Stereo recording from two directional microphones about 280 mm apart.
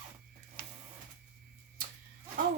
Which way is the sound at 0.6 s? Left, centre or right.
Right.